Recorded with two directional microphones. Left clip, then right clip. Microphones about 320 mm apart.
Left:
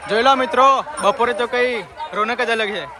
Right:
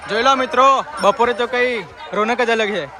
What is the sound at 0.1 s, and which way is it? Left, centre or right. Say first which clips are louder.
A man's voice: even; centre.